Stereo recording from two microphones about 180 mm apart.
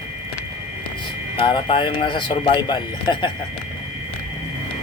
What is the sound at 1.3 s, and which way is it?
Speech, 25° left (ahead or behind).